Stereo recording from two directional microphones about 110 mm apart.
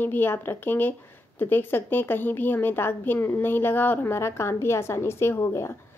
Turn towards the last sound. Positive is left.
turn(degrees=25)  # may be behind; listen again after turning